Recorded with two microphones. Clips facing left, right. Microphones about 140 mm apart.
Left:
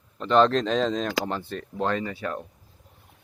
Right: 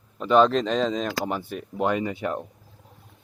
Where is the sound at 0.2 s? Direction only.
5° right (ahead or behind).